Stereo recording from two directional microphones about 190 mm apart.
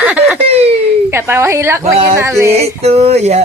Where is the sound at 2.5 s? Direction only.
35° right (ahead or behind).